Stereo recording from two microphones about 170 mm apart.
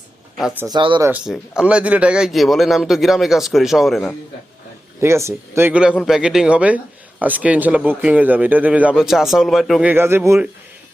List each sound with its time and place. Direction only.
0.6 s speech: 25° right (ahead or behind)
1.0 s a man's voice: 5° right (ahead or behind)
4.9 s a man's voice: 15° right (ahead or behind)
9.9 s speech: 15° right (ahead or behind)